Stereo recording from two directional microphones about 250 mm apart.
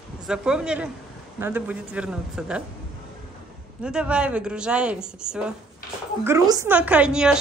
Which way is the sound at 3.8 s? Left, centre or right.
Centre.